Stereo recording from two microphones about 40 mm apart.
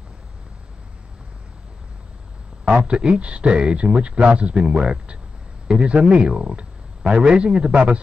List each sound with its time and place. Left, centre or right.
2.6 s speech: right